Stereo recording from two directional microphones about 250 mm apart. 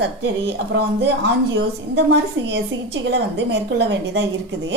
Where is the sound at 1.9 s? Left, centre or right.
Right.